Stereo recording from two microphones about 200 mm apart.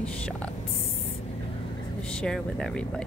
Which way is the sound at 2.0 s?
5° left (ahead or behind).